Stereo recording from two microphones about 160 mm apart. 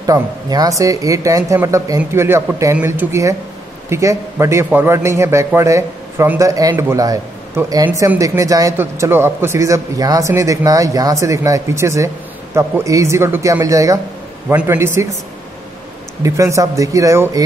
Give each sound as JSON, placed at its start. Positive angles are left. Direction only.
{"t": 0.0, "sound": "a man's voice", "side_deg": -25}
{"t": 16.2, "sound": "a man's voice", "side_deg": -20}